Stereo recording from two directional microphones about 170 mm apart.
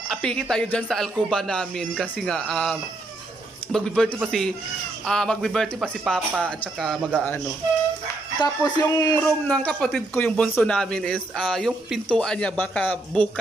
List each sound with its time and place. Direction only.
0.1 s speech: 5° left (ahead or behind)
8.4 s speech: 25° left (ahead or behind)
9.5 s speech: 5° left (ahead or behind)